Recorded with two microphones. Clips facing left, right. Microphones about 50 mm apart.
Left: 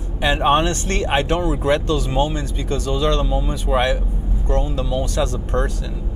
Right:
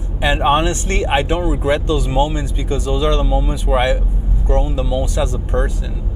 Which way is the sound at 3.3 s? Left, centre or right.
Centre.